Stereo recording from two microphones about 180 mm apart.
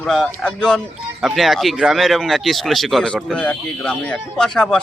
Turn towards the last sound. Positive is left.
turn(degrees=5)  # may be behind; listen again after turning